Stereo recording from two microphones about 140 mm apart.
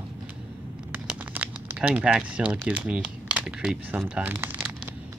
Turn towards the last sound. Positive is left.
turn(degrees=-15)  # may be behind; listen again after turning